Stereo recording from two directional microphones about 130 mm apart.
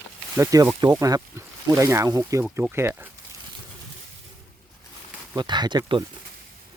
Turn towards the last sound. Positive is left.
turn(degrees=-35)  # may be behind; listen again after turning